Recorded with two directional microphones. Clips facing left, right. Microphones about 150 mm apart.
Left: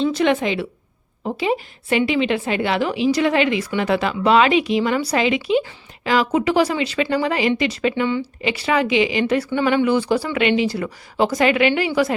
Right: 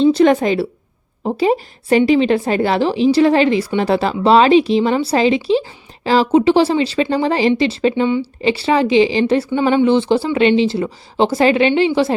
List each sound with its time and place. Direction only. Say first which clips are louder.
0.0 s speech: right 6 dB; 30° right (ahead or behind)
8.0 s speech: right 4 dB; 20° right (ahead or behind)
8.4 s speech: right 5 dB; 30° right (ahead or behind)
9.5 s speech: right 4 dB; 20° right (ahead or behind)